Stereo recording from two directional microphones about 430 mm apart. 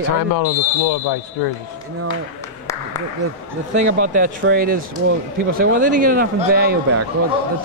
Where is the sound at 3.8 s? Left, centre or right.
Centre.